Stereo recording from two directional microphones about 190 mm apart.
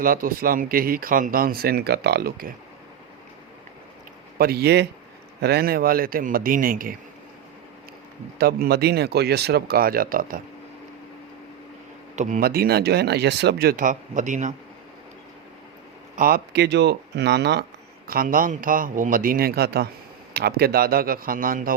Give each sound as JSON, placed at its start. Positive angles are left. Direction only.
{"t": 0.0, "sound": "speech", "side_deg": -50}
{"t": 4.4, "sound": "speech", "side_deg": -55}
{"t": 8.4, "sound": "speech", "side_deg": -55}
{"t": 12.1, "sound": "speech", "side_deg": -40}
{"t": 16.1, "sound": "speech", "side_deg": -50}
{"t": 18.1, "sound": "speech", "side_deg": -50}